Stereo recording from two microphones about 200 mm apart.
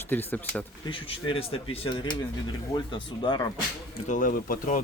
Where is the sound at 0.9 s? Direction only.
25° left (ahead or behind).